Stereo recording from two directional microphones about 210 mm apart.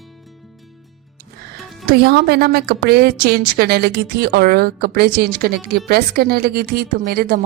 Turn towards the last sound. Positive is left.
turn(degrees=-45)  # may be behind; listen again after turning